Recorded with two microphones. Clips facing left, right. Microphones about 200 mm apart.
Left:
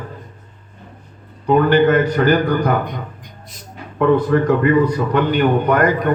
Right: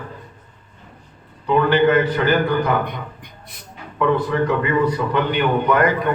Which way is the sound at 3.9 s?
45° left (ahead or behind).